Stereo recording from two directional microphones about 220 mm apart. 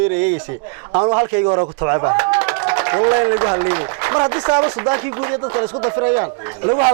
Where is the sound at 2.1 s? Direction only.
10° right (ahead or behind).